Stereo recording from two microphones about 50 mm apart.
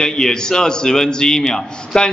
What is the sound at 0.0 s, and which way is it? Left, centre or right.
A man's voice, centre.